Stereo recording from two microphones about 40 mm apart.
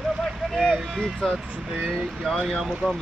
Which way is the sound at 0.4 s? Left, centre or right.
Centre.